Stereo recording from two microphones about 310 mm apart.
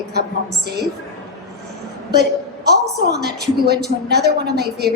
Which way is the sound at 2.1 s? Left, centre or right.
Right.